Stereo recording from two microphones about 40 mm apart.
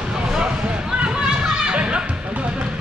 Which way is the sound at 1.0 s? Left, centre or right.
Right.